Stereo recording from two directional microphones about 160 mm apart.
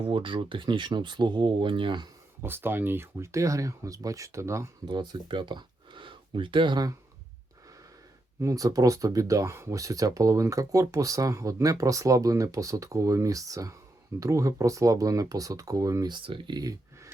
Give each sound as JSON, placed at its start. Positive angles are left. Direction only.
{"t": 0.0, "sound": "speech", "side_deg": -35}
{"t": 2.4, "sound": "speech", "side_deg": -15}
{"t": 4.9, "sound": "speech", "side_deg": -30}
{"t": 8.4, "sound": "speech", "side_deg": -20}